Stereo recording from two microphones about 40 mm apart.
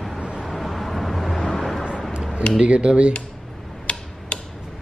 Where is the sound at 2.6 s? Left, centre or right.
Right.